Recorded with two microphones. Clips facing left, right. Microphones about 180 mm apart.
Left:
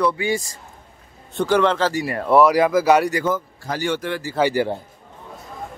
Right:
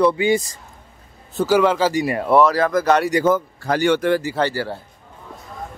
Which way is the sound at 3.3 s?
65° right (ahead or behind).